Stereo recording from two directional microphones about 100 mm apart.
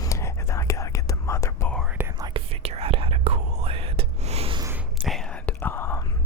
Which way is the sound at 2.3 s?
85° right.